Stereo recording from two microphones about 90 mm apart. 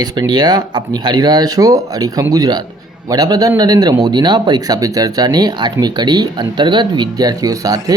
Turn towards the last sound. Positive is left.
turn(degrees=-40)  # may be behind; listen again after turning